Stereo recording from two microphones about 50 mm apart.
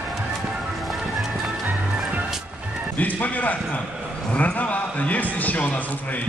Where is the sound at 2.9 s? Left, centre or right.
Left.